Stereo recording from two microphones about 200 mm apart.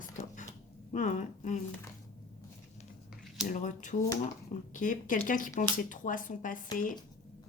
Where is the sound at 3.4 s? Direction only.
40° left (ahead or behind).